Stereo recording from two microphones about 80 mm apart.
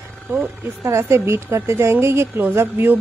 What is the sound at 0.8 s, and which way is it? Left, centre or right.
A woman's voice, right.